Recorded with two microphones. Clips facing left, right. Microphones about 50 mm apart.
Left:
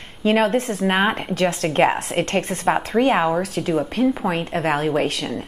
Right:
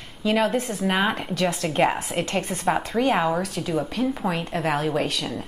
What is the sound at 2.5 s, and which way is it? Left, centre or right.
A woman's voice, centre.